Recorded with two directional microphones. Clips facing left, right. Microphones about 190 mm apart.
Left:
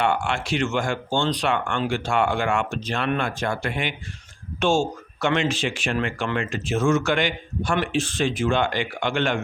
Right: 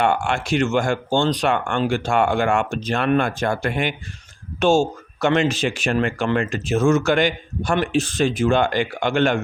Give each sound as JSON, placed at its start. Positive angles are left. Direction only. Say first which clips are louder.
{"t": 0.0, "sound": "speech", "louder": "right 3 dB", "side_deg": -45}